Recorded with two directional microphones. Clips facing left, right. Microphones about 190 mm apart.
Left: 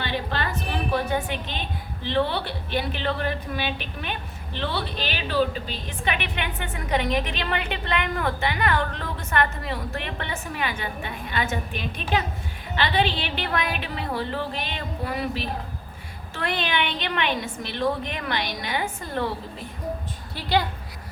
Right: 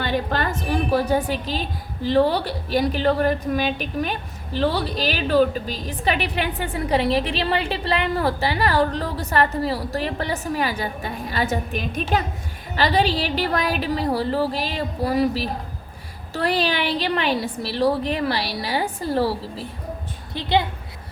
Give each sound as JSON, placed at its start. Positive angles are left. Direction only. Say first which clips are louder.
{"t": 0.0, "sound": "a woman's voice", "louder": "right 5 dB", "side_deg": -45}
{"t": 20.3, "sound": "a woman's voice", "louder": "right 3 dB", "side_deg": -20}